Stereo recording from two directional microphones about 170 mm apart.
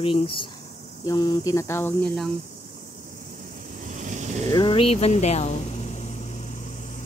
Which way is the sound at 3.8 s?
45° right (ahead or behind).